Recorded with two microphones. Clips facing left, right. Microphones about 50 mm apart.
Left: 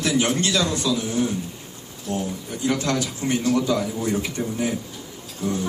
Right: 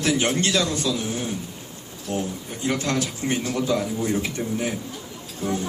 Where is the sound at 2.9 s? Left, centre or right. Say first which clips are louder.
Left 1 dB; right.